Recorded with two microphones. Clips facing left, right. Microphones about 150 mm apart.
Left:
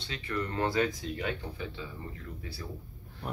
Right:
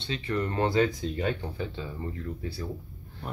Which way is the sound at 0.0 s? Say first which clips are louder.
Right 5 dB; 25° right (ahead or behind).